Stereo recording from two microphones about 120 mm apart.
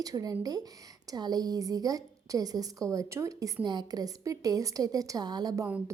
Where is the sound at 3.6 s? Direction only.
35° right (ahead or behind).